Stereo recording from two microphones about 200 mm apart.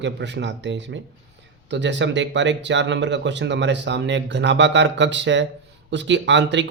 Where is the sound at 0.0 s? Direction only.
60° right (ahead or behind).